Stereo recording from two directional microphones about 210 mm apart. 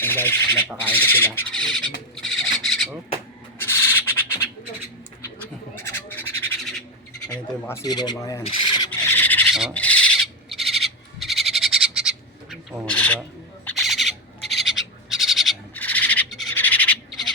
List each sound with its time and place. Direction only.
0.0 s speech: 10° left (ahead or behind)
2.1 s a sound: centre (ahead or behind)
3.6 s bird: 10° left (ahead or behind)
7.3 s rub: 15° left (ahead or behind)
8.9 s a sound: 10° left (ahead or behind)
9.6 s owl: centre (ahead or behind)
13.7 s bird: centre (ahead or behind)